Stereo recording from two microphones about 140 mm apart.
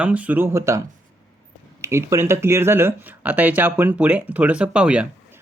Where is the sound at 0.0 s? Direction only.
10° right (ahead or behind).